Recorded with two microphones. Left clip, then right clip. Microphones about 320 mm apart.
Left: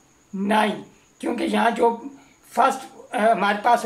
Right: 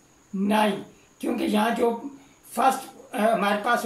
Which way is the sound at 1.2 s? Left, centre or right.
Left.